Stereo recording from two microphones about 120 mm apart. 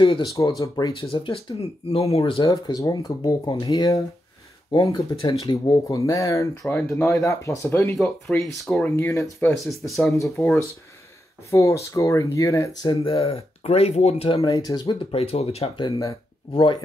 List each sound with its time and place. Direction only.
0.2 s speech: 30° left (ahead or behind)
1.0 s speech: 50° left (ahead or behind)
2.4 s speech: 35° left (ahead or behind)
8.0 s speech: centre (ahead or behind)
8.7 s speech: 15° left (ahead or behind)
9.7 s speech: centre (ahead or behind)
10.1 s speech: 25° left (ahead or behind)
11.5 s speech: 25° left (ahead or behind)
13.0 s speech: 50° left (ahead or behind)
14.4 s speech: 35° left (ahead or behind)
15.0 s speech: 55° left (ahead or behind)